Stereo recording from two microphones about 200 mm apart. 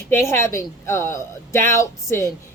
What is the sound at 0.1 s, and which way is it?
A woman's voice, 15° left (ahead or behind).